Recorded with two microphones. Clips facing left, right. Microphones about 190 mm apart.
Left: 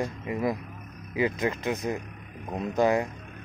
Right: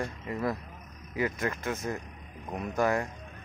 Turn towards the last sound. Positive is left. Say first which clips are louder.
# left 4 dB
turn(degrees=20)  # may be behind; listen again after turning